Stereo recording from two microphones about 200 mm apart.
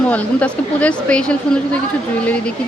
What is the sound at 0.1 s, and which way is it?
A woman's voice, 5° left (ahead or behind).